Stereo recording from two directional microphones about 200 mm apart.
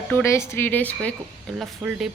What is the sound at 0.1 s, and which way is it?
Speech, 15° left (ahead or behind).